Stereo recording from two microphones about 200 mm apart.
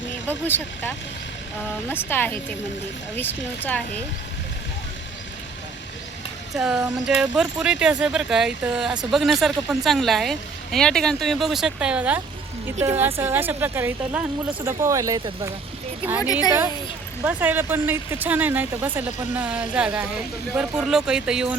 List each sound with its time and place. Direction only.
0.4 s speech: 10° left (ahead or behind)
6.5 s speech: centre (ahead or behind); by 15.5 s 15° right (ahead or behind)
16.2 s speech: 20° left (ahead or behind)
17.2 s speech: 10° right (ahead or behind)